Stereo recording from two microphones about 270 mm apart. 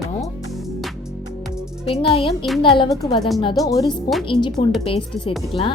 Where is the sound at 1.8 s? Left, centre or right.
Centre.